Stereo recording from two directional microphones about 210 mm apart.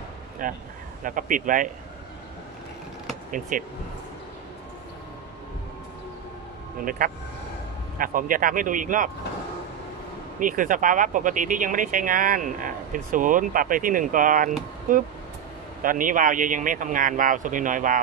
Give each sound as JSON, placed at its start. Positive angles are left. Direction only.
{"t": 0.4, "sound": "speech", "side_deg": -40}
{"t": 3.3, "sound": "speech", "side_deg": -40}
{"t": 6.8, "sound": "speech", "side_deg": -40}
{"t": 10.4, "sound": "speech", "side_deg": -40}